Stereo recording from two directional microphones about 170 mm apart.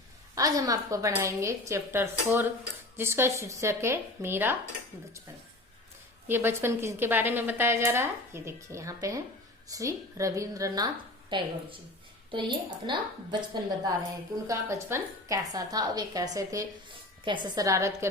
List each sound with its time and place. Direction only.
0.3 s a woman's voice: 20° right (ahead or behind)
6.2 s a woman's voice: 15° right (ahead or behind)
14.4 s a woman's voice: 15° right (ahead or behind)